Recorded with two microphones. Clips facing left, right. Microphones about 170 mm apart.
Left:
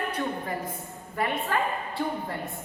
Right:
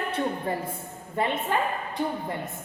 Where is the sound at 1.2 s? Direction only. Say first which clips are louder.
Right 1 dB; 20° right (ahead or behind).